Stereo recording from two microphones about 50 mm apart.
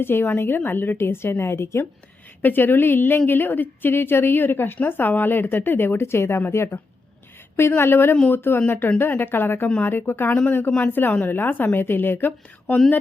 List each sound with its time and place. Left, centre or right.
0.0 s a woman's voice: left
2.4 s a woman's voice: left
7.8 s a woman's voice: left
10.4 s a woman's voice: left